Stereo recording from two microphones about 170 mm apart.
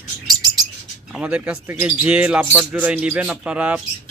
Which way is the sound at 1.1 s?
5° right (ahead or behind).